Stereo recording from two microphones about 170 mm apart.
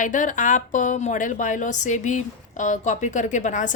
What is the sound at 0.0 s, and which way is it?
Speech, 50° left (ahead or behind).